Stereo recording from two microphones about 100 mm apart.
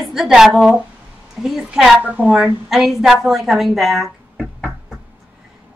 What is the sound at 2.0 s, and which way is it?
Speech, 15° right (ahead or behind).